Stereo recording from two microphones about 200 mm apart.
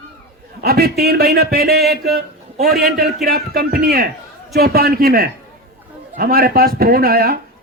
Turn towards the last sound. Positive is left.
turn(degrees=-50)  # may be behind; listen again after turning